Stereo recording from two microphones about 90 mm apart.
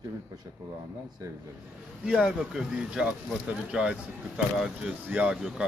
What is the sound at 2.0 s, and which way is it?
Speech, 10° right (ahead or behind).